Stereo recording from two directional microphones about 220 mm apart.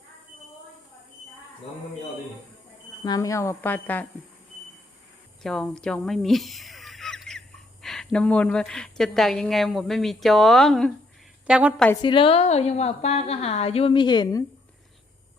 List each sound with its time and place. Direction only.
3.0 s speech: 15° left (ahead or behind)
5.4 s a woman's voice: centre (ahead or behind)
12.0 s a woman's voice: 25° left (ahead or behind)